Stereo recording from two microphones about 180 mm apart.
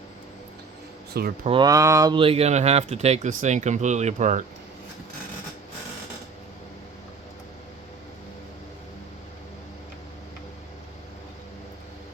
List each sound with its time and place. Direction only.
1.5 s speech: 25° right (ahead or behind)
2.1 s speech: 30° right (ahead or behind)